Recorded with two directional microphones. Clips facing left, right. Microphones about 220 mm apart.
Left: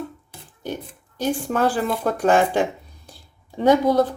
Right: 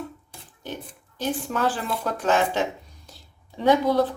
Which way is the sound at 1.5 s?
50° left (ahead or behind).